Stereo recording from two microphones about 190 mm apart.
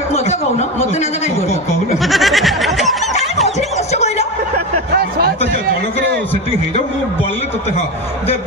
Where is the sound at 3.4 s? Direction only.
35° left (ahead or behind).